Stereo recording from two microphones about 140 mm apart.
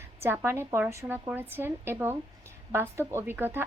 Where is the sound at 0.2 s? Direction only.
15° right (ahead or behind).